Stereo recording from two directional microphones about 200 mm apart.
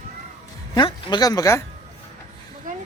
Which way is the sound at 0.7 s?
20° left (ahead or behind).